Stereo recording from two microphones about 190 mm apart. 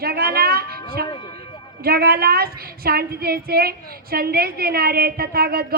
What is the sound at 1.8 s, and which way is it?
A woman's voice, 55° right (ahead or behind).